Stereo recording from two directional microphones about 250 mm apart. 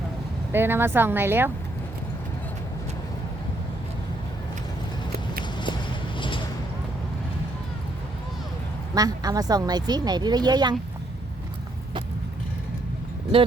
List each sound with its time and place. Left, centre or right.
0.5 s speech: centre
5.4 s walk: centre
6.1 s a sound: centre
9.0 s speech: centre